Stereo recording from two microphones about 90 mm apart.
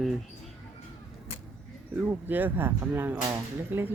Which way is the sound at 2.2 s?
20° right (ahead or behind).